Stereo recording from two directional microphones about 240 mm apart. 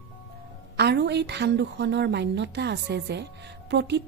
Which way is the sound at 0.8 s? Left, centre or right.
Right.